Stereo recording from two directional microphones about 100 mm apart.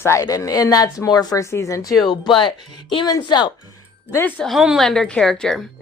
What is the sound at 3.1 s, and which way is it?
Speech, 45° left (ahead or behind).